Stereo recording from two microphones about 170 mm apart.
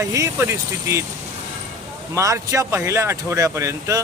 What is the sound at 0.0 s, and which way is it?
Speech, 15° right (ahead or behind).